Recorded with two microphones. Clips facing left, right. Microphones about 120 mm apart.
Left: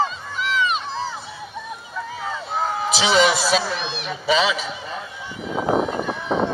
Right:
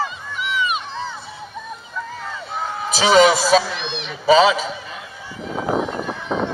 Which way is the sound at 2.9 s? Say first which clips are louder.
Right 5 dB; 45° right (ahead or behind).